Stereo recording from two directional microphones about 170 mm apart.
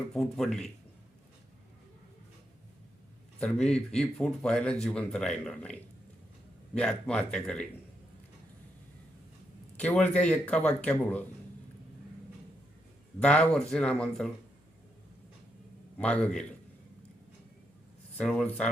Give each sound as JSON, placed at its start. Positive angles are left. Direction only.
{"t": 0.1, "sound": "speech", "side_deg": 0}
{"t": 3.4, "sound": "speech", "side_deg": 5}
{"t": 9.7, "sound": "speech", "side_deg": 10}
{"t": 13.2, "sound": "speech", "side_deg": 5}
{"t": 16.0, "sound": "speech", "side_deg": 5}
{"t": 18.2, "sound": "speech", "side_deg": 5}